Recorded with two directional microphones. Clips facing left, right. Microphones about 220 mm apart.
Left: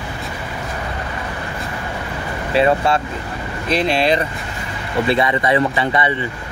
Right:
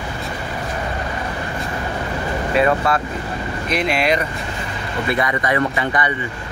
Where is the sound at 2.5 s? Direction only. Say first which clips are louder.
Left 2 dB; 30° left (ahead or behind).